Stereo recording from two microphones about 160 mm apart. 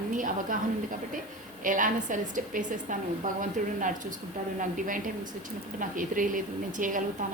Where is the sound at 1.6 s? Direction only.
55° right (ahead or behind).